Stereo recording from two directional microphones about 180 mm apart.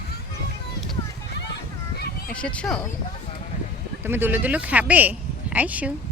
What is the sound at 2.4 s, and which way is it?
Speech, 5° left (ahead or behind).